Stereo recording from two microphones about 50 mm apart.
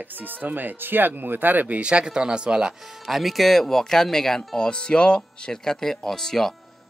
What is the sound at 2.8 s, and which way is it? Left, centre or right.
Speech, centre.